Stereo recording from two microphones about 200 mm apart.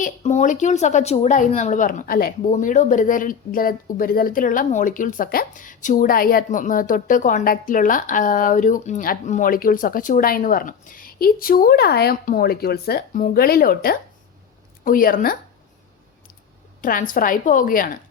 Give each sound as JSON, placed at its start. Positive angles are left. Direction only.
{"t": 0.0, "sound": "a woman's voice", "side_deg": 35}
{"t": 16.8, "sound": "speech", "side_deg": 45}